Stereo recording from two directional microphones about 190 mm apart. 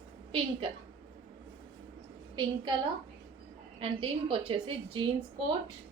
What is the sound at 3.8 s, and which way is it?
A woman's voice, 30° right (ahead or behind).